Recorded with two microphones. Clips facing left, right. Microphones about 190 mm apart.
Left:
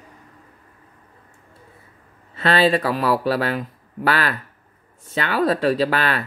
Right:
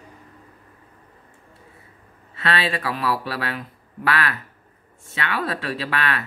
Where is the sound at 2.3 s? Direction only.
40° left (ahead or behind).